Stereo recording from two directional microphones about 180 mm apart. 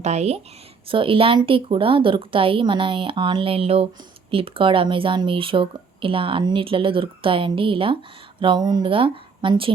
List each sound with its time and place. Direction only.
0.0 s a woman's voice: 40° right (ahead or behind)